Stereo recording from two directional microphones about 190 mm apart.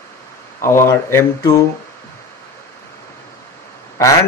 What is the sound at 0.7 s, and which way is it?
Speech, 15° left (ahead or behind).